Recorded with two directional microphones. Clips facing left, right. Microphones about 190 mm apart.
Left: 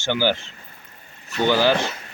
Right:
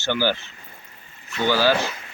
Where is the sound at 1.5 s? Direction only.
20° left (ahead or behind).